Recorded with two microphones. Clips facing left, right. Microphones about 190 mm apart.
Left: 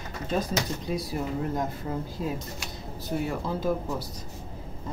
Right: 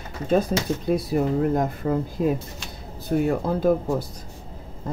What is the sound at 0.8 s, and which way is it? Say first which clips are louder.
Speech: right 8 dB; 55° right (ahead or behind).